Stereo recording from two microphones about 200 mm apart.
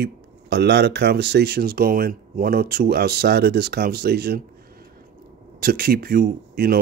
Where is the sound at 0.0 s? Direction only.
55° right (ahead or behind).